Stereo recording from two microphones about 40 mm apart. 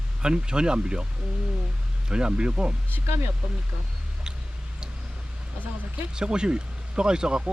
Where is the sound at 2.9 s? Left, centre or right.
Right.